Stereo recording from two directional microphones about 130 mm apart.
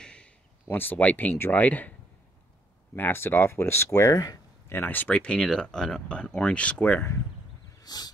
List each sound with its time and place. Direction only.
0.0 s a sound: 10° left (ahead or behind)
1.4 s speech: 15° left (ahead or behind)
3.0 s speech: 15° left (ahead or behind)
4.7 s speech: 15° left (ahead or behind)
7.8 s wild animals: 30° left (ahead or behind)